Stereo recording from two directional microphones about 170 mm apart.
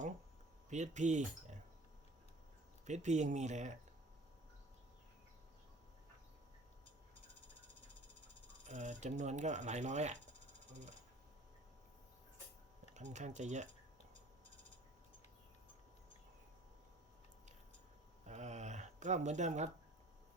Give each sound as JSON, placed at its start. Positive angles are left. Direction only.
{"t": 0.7, "sound": "speech", "side_deg": -45}
{"t": 2.8, "sound": "speech", "side_deg": -45}
{"t": 8.6, "sound": "speech", "side_deg": -45}
{"t": 12.9, "sound": "speech", "side_deg": -45}
{"t": 18.3, "sound": "speech", "side_deg": -45}